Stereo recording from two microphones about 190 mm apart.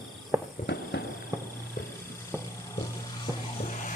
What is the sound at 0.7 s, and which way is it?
Clip-clop, 65° left (ahead or behind).